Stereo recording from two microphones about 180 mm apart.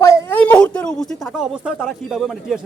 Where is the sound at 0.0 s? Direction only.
15° left (ahead or behind).